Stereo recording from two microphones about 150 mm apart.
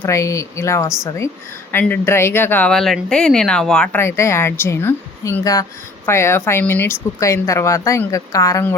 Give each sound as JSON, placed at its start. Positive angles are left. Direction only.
{"t": 0.0, "sound": "speech", "side_deg": 20}
{"t": 4.0, "sound": "a woman's voice", "side_deg": 20}